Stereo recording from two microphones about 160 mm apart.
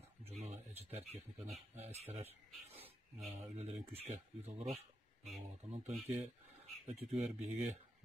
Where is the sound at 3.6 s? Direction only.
40° right (ahead or behind).